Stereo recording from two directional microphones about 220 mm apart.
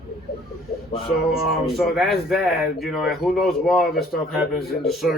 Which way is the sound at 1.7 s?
Centre (ahead or behind).